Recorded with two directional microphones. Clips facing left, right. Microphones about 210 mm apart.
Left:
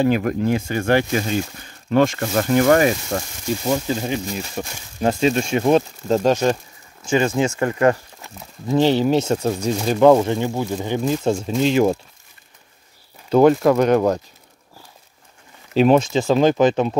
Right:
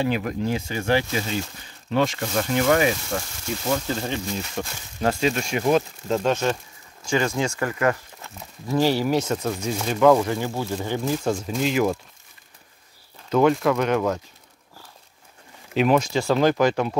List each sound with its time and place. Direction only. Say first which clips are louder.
0.0 s speech: left 6 dB; 50° left (ahead or behind)
3.1 s speech: left 4 dB; 35° left (ahead or behind)
3.6 s speech: left 3 dB; 15° left (ahead or behind)
5.2 s speech: left 7 dB; 25° left (ahead or behind)
7.1 s speech: left 5 dB; 20° left (ahead or behind)
13.3 s speech: left 5 dB; 35° left (ahead or behind)
15.7 s speech: left 5 dB; 30° left (ahead or behind)